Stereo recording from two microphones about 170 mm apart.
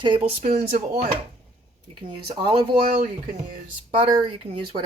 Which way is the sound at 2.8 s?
50° right (ahead or behind).